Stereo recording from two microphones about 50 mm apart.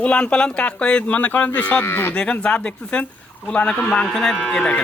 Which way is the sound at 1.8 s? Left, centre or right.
Left.